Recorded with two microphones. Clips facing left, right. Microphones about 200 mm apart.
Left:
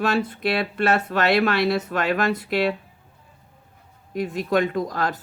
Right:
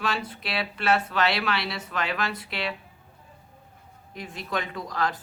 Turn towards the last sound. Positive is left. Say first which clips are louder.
# left 5 dB
turn(degrees=45)  # may be behind; listen again after turning